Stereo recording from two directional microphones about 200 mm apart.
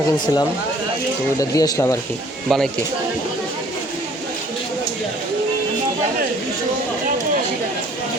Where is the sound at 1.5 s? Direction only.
15° left (ahead or behind).